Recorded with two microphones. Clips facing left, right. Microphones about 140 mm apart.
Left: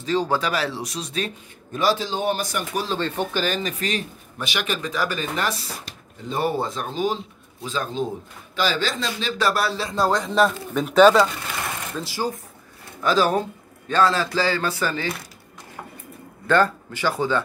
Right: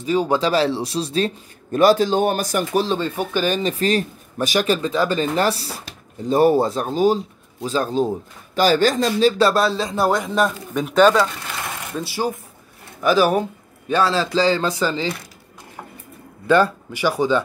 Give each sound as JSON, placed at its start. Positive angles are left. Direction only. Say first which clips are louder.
{"t": 0.0, "sound": "speech", "louder": "right 3 dB", "side_deg": -15}
{"t": 0.4, "sound": "speech", "louder": "right 7 dB", "side_deg": -30}
{"t": 1.7, "sound": "a man's voice", "louder": "right 8 dB", "side_deg": -50}
{"t": 3.0, "sound": "speech", "louder": "right 2 dB", "side_deg": -15}
{"t": 3.6, "sound": "a man's voice", "louder": "right 7 dB", "side_deg": -35}
{"t": 9.4, "sound": "speech", "louder": "right 5 dB", "side_deg": -25}
{"t": 10.2, "sound": "speech", "louder": "even", "side_deg": -5}
{"t": 12.0, "sound": "speech", "louder": "right 4 dB", "side_deg": -15}
{"t": 16.4, "sound": "speech", "louder": "right 3 dB", "side_deg": -15}